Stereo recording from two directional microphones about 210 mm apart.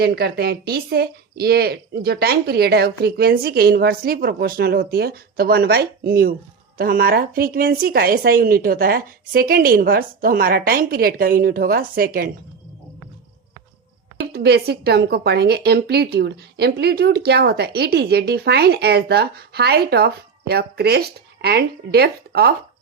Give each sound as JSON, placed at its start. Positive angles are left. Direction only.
{"t": 0.0, "sound": "a woman's voice", "side_deg": -50}
{"t": 14.3, "sound": "a woman's voice", "side_deg": -50}